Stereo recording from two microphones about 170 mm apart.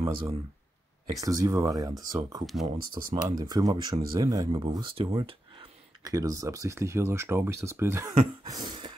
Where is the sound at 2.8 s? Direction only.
60° right (ahead or behind).